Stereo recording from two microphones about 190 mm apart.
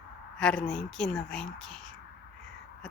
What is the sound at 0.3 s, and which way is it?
Speech, 5° left (ahead or behind).